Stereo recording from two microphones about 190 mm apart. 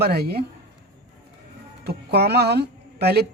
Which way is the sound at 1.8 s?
55° right (ahead or behind).